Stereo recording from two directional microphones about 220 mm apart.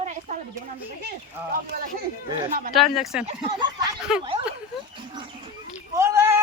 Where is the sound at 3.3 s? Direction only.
20° right (ahead or behind).